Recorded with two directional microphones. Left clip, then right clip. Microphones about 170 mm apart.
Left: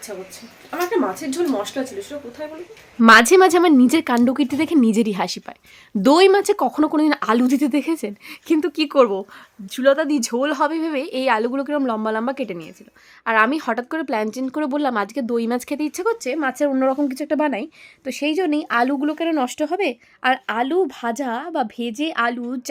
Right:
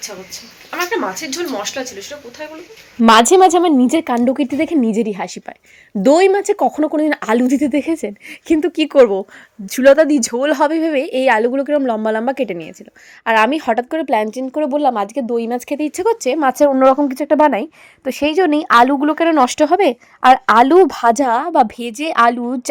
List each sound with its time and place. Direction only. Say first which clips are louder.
0.7 s speech: right 2 dB; 10° left (ahead or behind)
3.0 s speech: right 2 dB; 10° right (ahead or behind)
9.6 s a woman's voice: right 7 dB; 30° right (ahead or behind); by 15.9 s centre (ahead or behind)
15.9 s speech: right 7 dB; 20° right (ahead or behind)
16.7 s speech: right 8 dB; 15° right (ahead or behind)
21.8 s speech: right 7 dB; 35° right (ahead or behind)